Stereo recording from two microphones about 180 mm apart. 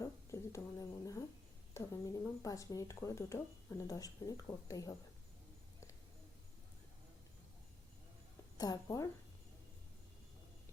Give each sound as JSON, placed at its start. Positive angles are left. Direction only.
{"t": 0.0, "sound": "speech", "side_deg": 20}
{"t": 8.5, "sound": "speech", "side_deg": 20}